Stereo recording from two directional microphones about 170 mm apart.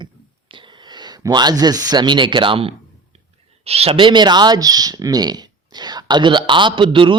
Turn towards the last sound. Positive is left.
turn(degrees=-30)  # may be behind; listen again after turning